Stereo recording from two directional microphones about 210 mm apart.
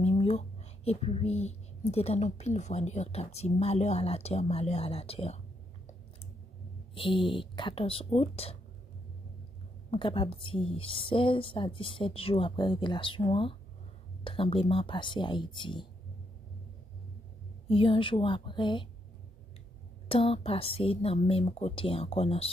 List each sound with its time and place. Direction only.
0.0 s speech: 30° left (ahead or behind)
7.0 s a woman's voice: 25° left (ahead or behind)
9.8 s a woman's voice: 25° left (ahead or behind)
17.6 s a woman's voice: 25° left (ahead or behind)
20.1 s a woman's voice: 25° left (ahead or behind)